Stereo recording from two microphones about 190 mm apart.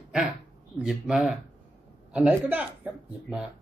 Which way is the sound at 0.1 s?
5° right (ahead or behind).